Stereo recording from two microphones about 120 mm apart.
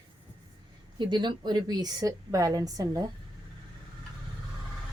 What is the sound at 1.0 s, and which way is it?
Speech, 40° right (ahead or behind).